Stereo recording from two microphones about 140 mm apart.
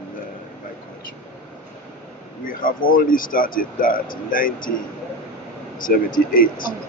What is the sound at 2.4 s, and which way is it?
Speech, 85° left.